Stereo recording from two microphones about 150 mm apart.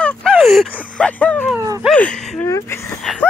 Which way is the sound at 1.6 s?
20° right (ahead or behind).